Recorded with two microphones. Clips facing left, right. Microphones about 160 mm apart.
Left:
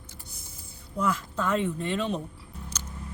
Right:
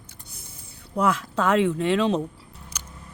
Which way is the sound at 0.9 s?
75° right (ahead or behind).